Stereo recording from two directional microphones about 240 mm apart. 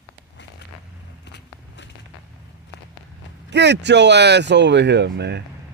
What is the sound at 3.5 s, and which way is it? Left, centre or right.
Speech, right.